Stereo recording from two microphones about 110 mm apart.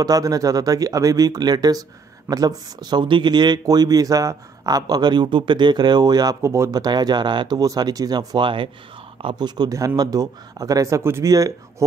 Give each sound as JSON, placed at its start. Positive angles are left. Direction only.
{"t": 0.0, "sound": "speech", "side_deg": -35}
{"t": 6.4, "sound": "speech", "side_deg": -25}